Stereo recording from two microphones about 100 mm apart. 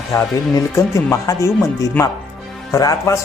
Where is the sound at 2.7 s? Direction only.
35° left (ahead or behind).